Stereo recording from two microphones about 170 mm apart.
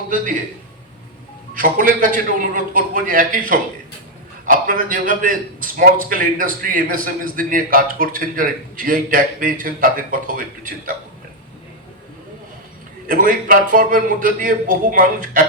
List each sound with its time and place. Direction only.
1.5 s a man's voice: 55° right (ahead or behind)
13.1 s a man's voice: 55° right (ahead or behind)